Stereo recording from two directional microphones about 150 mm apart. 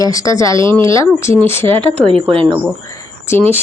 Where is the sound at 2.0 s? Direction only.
35° right (ahead or behind).